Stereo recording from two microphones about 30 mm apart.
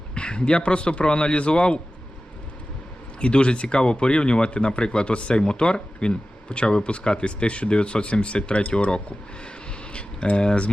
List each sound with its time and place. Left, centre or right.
0.1 s speech: left
3.2 s speech: left
8.9 s a sound: left
10.4 s speech: left